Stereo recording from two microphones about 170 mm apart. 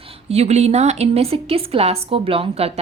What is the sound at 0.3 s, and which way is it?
A woman's voice, 40° right (ahead or behind).